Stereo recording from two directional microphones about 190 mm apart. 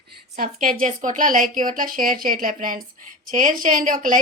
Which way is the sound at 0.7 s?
40° right (ahead or behind).